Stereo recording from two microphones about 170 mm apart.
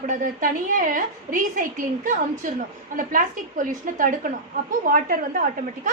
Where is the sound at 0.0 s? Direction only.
55° right (ahead or behind).